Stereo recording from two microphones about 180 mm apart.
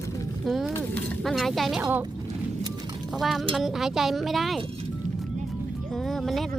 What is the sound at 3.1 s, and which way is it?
Speech, centre (ahead or behind).